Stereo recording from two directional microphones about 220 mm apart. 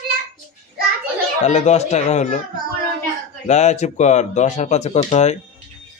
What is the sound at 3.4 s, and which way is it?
Speech, 30° left (ahead or behind).